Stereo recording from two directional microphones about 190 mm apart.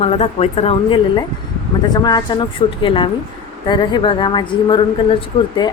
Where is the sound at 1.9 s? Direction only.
20° left (ahead or behind).